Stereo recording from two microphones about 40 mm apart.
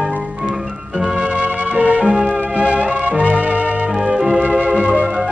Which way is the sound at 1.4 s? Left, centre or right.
Right.